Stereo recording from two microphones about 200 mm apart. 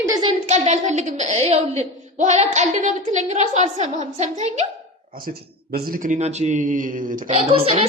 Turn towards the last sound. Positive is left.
turn(degrees=-30)  # may be behind; listen again after turning